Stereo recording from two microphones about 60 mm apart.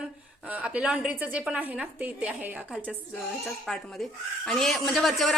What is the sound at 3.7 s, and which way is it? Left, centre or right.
A man's voice, centre.